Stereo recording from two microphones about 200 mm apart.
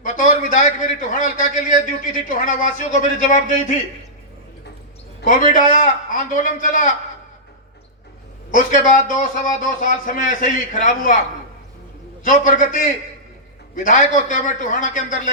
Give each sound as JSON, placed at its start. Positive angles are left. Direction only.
{"t": 0.0, "sound": "a man's voice", "side_deg": 40}
{"t": 5.2, "sound": "a man's voice", "side_deg": 40}
{"t": 8.4, "sound": "a man's voice", "side_deg": 40}
{"t": 12.2, "sound": "a man's voice", "side_deg": 40}